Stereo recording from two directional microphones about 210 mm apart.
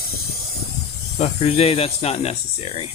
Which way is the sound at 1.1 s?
30° left (ahead or behind).